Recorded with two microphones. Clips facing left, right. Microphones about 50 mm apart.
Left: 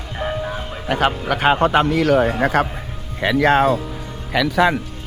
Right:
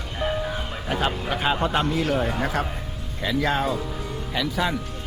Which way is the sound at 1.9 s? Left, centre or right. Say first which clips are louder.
Left 8 dB; left.